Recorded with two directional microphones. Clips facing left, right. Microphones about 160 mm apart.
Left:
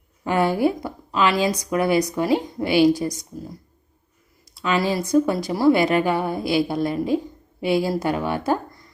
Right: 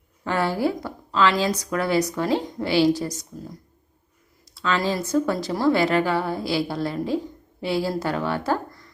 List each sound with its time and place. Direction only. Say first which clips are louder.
0.3 s speech: left 3 dB; 15° left (ahead or behind)
4.5 s speech: left 2 dB; 15° left (ahead or behind)